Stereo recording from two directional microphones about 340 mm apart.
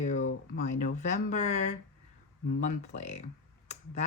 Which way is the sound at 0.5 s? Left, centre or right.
Left.